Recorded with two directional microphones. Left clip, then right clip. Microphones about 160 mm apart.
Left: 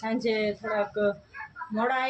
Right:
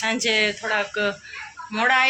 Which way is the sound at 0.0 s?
5° left (ahead or behind).